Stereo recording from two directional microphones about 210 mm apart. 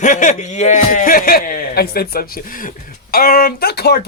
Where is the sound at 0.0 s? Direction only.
35° left (ahead or behind).